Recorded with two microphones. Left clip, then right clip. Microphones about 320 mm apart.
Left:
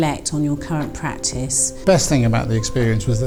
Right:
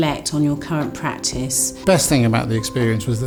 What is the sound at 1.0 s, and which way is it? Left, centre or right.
Speech, left.